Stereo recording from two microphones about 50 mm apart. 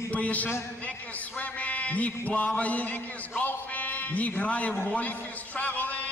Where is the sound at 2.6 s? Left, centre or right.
Left.